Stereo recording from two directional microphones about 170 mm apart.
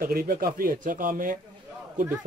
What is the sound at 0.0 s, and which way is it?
Speech, 60° right (ahead or behind).